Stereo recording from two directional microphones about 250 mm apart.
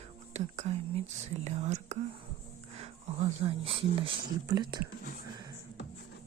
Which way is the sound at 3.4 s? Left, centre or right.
Right.